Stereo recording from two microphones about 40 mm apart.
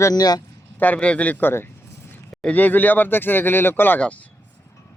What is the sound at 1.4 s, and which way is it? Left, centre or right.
Speech, left.